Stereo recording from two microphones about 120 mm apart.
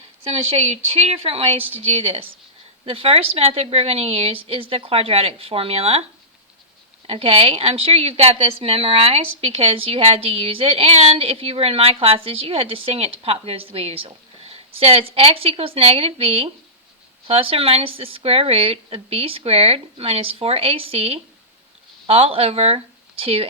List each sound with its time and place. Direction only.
0.3 s a woman's voice: 60° right (ahead or behind)
7.1 s a woman's voice: 50° right (ahead or behind)